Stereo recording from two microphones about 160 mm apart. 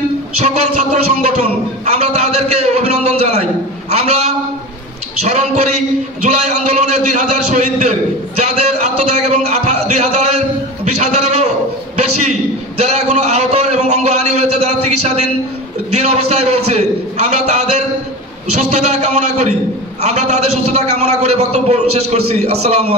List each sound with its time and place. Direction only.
0.4 s a man's voice: 45° right (ahead or behind)
6.2 s a man's voice: 50° right (ahead or behind)
11.0 s a sound: 45° right (ahead or behind)
12.0 s a man's voice: 45° right (ahead or behind)